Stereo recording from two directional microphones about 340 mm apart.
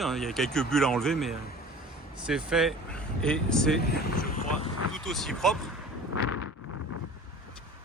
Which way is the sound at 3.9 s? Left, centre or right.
Left.